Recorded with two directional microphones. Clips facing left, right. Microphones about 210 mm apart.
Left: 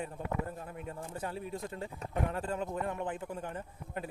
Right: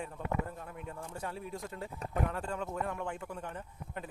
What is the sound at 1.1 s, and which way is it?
Speech, centre (ahead or behind).